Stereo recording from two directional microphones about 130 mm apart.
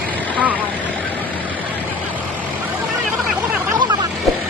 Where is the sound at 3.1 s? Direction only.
10° right (ahead or behind).